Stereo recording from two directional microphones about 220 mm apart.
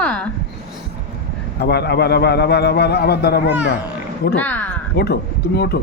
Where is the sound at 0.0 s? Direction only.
5° left (ahead or behind).